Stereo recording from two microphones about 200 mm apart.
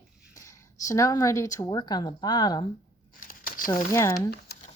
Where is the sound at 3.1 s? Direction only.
45° left (ahead or behind).